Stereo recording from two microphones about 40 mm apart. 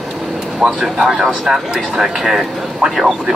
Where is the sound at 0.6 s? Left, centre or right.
Centre.